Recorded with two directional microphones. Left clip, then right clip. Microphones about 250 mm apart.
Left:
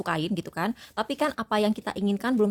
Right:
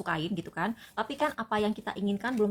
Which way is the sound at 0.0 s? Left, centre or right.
Left.